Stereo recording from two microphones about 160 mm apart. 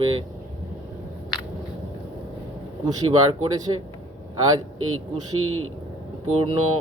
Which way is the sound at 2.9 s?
25° right (ahead or behind).